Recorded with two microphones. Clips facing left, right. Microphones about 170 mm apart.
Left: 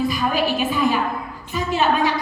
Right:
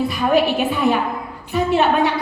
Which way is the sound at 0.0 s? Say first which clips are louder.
Right 4 dB; 60° right (ahead or behind).